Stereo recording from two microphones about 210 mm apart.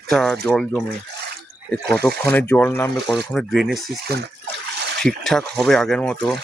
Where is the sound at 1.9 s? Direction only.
10° left (ahead or behind).